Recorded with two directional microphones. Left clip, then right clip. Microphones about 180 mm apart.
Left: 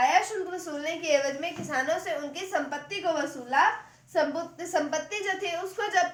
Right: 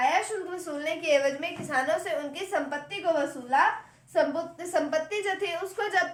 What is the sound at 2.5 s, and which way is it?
A woman's voice, 20° right (ahead or behind).